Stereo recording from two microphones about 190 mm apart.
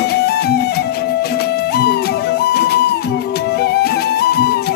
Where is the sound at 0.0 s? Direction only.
55° left (ahead or behind).